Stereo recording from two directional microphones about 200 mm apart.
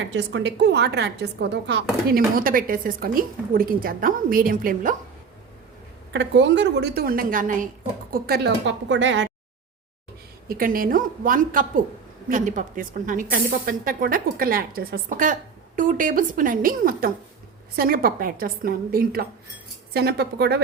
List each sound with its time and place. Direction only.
0.0 s a woman's voice: 65° right (ahead or behind); by 4.9 s 45° right (ahead or behind)
6.1 s a woman's voice: 65° right (ahead or behind); by 7.7 s 40° right (ahead or behind)
8.1 s a woman's voice: 55° right (ahead or behind)
10.5 s a woman's voice: 45° right (ahead or behind)